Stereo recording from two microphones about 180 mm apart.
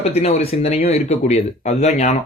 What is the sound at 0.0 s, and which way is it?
Speech, 35° left (ahead or behind).